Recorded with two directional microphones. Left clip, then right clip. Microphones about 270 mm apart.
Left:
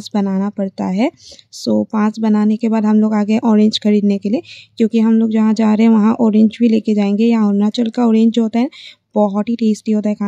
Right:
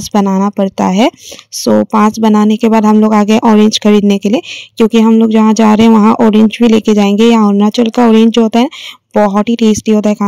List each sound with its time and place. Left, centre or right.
0.1 s speech: right